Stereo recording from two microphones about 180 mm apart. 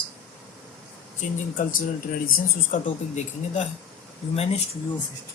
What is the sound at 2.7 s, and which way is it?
Speech, 40° left (ahead or behind).